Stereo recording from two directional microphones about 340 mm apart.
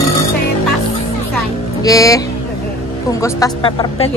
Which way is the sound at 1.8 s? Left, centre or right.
Centre.